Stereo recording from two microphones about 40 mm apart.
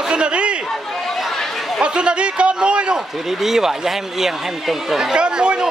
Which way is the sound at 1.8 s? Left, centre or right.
Right.